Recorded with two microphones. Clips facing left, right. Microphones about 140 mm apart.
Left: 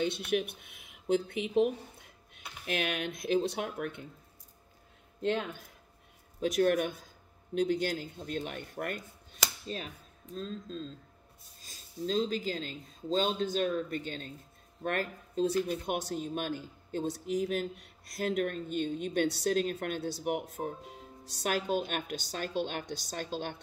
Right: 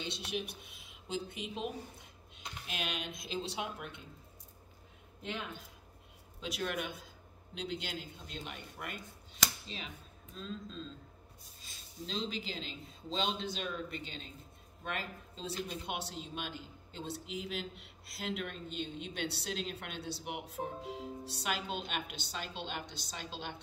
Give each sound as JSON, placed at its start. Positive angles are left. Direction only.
{"t": 0.0, "sound": "speech", "side_deg": 55}
{"t": 6.4, "sound": "speech", "side_deg": 50}